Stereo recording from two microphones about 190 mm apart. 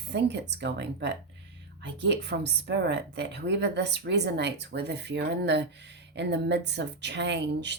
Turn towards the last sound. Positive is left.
turn(degrees=-65)  # may be behind; listen again after turning